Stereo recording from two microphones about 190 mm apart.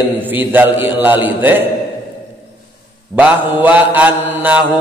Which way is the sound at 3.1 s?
10° right (ahead or behind).